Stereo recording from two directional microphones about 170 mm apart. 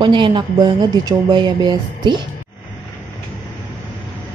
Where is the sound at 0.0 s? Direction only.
30° right (ahead or behind).